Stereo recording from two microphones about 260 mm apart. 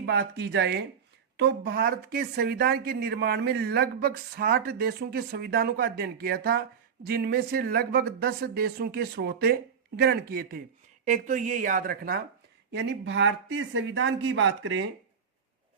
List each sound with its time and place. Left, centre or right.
0.0 s a woman's voice: right